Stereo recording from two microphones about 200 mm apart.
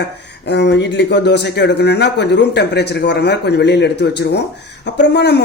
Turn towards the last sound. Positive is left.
turn(degrees=55)  # may be behind; listen again after turning